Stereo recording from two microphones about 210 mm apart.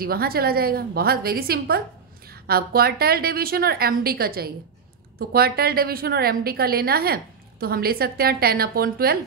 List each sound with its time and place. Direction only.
0.0 s a woman's voice: 45° right (ahead or behind)